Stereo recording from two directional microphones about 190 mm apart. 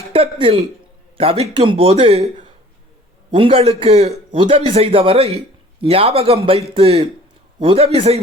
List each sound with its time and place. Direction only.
0.1 s speech: 30° right (ahead or behind)
3.3 s a man's voice: 30° right (ahead or behind)